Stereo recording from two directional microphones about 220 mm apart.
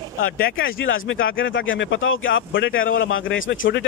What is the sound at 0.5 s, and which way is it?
Speech, 65° left (ahead or behind).